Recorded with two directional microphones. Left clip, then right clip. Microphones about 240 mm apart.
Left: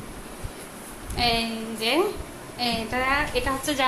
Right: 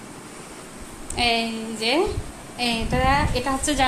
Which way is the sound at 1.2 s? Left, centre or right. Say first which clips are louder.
Right 2 dB; right.